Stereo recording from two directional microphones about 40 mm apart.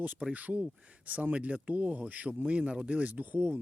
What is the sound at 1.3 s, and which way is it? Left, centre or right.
Speech, right.